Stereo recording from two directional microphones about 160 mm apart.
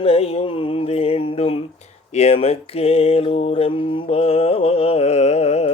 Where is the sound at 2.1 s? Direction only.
40° left (ahead or behind).